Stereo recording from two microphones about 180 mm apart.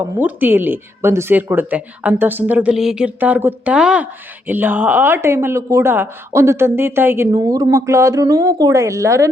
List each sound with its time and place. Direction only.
0.0 s speech: 10° right (ahead or behind)